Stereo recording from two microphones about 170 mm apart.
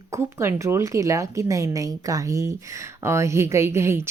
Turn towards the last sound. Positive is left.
turn(degrees=-15)  # may be behind; listen again after turning